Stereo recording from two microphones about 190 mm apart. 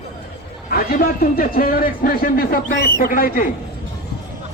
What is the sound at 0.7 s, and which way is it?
A man's voice, 50° left (ahead or behind).